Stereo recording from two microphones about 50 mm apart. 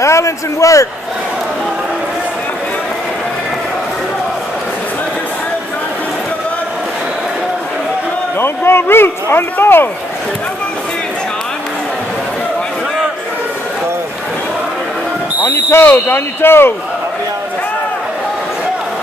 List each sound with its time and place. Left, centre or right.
0.0 s a man's voice: left
8.4 s speech: left
15.4 s speech: left